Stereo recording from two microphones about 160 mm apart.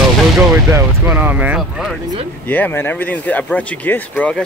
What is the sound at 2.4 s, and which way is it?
Speech, 10° left (ahead or behind).